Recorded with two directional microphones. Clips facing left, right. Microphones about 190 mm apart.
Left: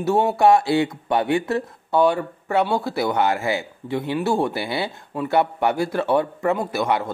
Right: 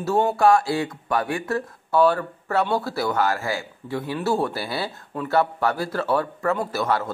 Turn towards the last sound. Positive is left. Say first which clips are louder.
# left 2 dB
turn(degrees=20)  # may be behind; listen again after turning